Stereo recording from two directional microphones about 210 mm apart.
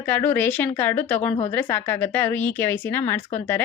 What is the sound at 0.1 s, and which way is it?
A woman's voice, 10° left (ahead or behind).